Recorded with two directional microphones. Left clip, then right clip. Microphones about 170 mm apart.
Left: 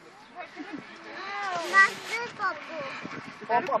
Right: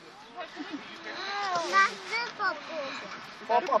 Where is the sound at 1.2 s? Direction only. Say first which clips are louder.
Right 1 dB; centre (ahead or behind).